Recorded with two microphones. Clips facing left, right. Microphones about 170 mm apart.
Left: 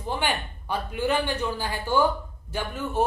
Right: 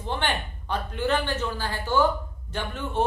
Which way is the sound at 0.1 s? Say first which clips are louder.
Left 1 dB; 10° left (ahead or behind).